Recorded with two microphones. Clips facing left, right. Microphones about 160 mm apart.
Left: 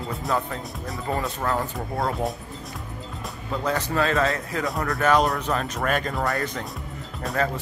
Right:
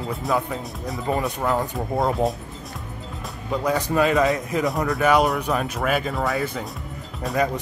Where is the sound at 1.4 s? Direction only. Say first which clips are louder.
Right 3 dB; centre (ahead or behind).